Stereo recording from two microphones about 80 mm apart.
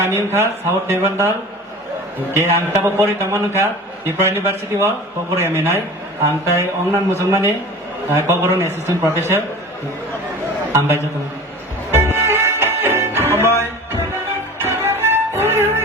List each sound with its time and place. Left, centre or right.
0.0 s a man's voice: right
2.3 s a man's voice: right
10.7 s a man's voice: right
12.1 s music: right
14.6 s music: right